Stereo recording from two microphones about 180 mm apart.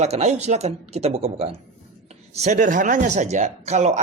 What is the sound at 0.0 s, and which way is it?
Speech, 40° right (ahead or behind).